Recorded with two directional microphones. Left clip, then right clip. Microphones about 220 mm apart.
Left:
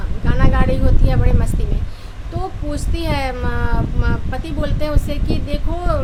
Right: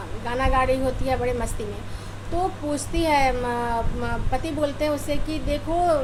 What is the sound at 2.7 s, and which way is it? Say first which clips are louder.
Speech: right 3 dB; 15° left (ahead or behind).